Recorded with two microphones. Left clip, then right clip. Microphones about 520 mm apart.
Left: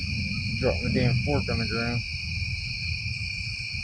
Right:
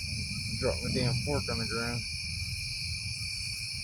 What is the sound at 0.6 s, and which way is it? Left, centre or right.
Speech, right.